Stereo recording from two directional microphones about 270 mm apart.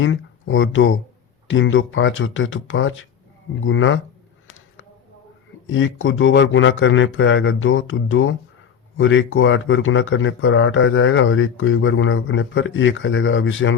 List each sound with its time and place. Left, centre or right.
0.0 s speech: left
5.6 s speech: left